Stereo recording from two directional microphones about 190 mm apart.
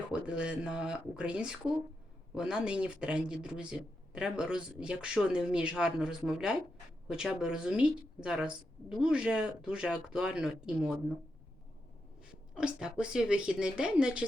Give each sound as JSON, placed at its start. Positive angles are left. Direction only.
{"t": 0.1, "sound": "speech", "side_deg": -5}
{"t": 12.3, "sound": "speech", "side_deg": -5}